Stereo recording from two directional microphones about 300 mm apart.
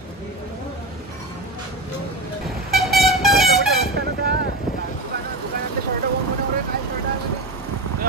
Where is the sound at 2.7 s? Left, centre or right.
Centre.